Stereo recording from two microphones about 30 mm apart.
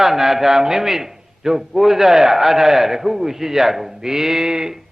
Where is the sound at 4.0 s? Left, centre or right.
Centre.